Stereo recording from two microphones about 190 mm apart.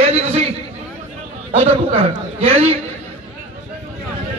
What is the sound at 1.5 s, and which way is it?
A man's voice, 30° right (ahead or behind).